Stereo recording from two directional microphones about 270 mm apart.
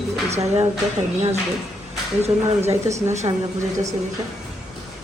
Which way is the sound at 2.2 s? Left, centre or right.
Right.